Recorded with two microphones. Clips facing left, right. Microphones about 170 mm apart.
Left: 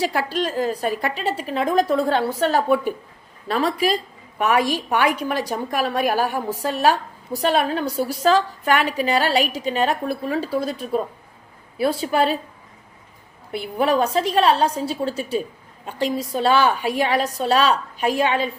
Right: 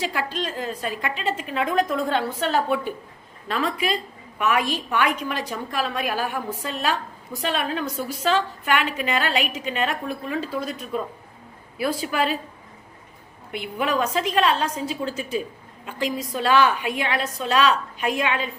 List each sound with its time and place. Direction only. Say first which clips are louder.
0.5 s a woman's voice: left 6 dB; 40° left (ahead or behind)
13.5 s a woman's voice: left 5 dB; 35° left (ahead or behind)